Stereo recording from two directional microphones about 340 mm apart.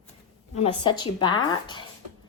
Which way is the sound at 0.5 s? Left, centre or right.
Centre.